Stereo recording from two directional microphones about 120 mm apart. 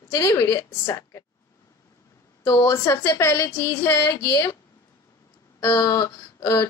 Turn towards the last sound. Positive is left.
turn(degrees=25)  # may be behind; listen again after turning